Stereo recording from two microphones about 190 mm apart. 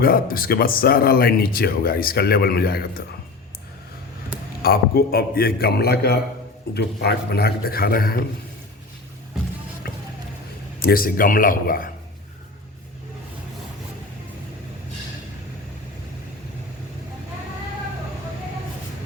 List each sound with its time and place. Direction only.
0.0 s speech: 50° left (ahead or behind)
4.6 s speech: 50° left (ahead or behind)
10.8 s speech: 50° left (ahead or behind)